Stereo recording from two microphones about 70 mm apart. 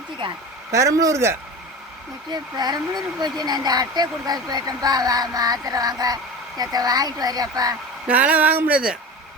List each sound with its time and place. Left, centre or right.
0.7 s speech: right
2.3 s speech: right
8.0 s speech: right